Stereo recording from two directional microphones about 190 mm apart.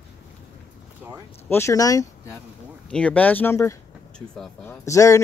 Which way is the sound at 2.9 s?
5° left (ahead or behind).